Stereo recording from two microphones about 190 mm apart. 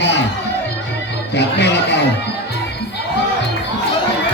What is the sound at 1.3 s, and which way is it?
Speech, 65° left (ahead or behind).